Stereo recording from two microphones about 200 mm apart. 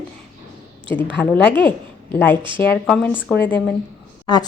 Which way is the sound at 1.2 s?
5° left (ahead or behind).